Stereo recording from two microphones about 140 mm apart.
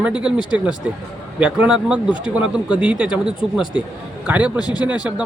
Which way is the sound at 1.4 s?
5° right (ahead or behind).